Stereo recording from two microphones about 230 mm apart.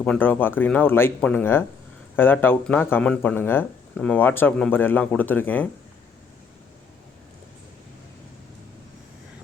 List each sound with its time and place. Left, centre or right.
0.0 s speech: centre